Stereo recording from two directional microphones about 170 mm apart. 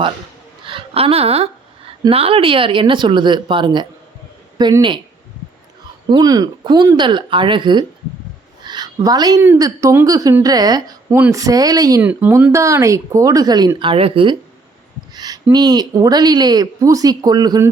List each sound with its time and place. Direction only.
0.6 s speech: 30° right (ahead or behind)
6.1 s a woman's voice: 25° right (ahead or behind)
12.0 s a woman's voice: 10° right (ahead or behind); by 14.3 s 30° right (ahead or behind)
15.1 s a sound: 25° right (ahead or behind)
15.5 s a woman's voice: 25° right (ahead or behind)